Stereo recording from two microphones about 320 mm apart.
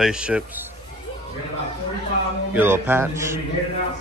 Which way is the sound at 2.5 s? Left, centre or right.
Centre.